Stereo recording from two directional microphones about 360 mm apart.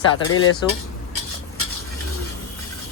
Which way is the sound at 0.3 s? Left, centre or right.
Left.